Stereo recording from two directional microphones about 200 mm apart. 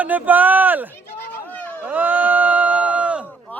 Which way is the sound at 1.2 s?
10° left (ahead or behind).